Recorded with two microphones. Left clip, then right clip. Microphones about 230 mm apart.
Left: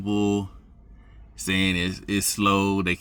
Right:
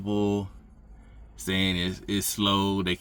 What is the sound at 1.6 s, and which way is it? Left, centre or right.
Speech, centre.